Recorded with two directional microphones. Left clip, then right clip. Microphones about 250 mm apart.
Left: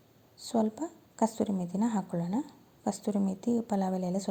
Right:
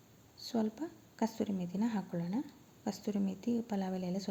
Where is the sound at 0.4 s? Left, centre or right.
Centre.